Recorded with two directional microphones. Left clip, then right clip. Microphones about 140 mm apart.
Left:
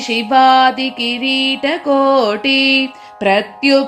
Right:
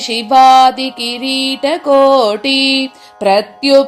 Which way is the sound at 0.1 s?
30° right (ahead or behind).